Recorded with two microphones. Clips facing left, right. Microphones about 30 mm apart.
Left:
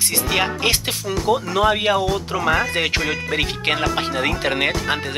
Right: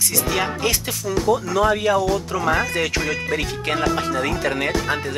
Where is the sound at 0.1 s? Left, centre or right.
Left.